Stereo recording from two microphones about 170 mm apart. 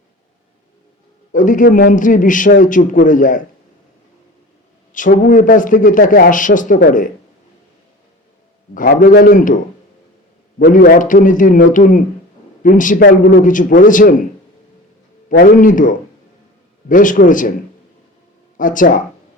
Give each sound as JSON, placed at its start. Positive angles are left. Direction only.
{"t": 1.3, "sound": "a man's voice", "side_deg": 50}
{"t": 4.9, "sound": "a man's voice", "side_deg": 50}
{"t": 8.7, "sound": "a man's voice", "side_deg": 50}
{"t": 10.6, "sound": "a man's voice", "side_deg": 60}
{"t": 15.3, "sound": "a man's voice", "side_deg": 55}
{"t": 18.5, "sound": "speech", "side_deg": 50}